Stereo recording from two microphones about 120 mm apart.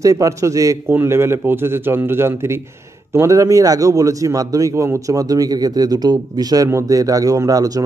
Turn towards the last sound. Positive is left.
turn(degrees=-30)  # may be behind; listen again after turning